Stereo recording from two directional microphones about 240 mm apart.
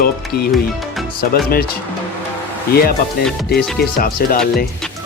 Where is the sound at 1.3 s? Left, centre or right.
Left.